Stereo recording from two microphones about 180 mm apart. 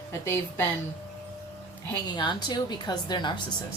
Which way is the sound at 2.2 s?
25° left (ahead or behind).